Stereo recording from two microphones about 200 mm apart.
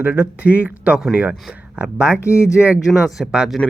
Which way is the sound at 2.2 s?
15° left (ahead or behind).